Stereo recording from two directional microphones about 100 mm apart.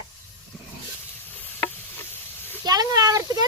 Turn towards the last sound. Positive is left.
turn(degrees=-40)  # may be behind; listen again after turning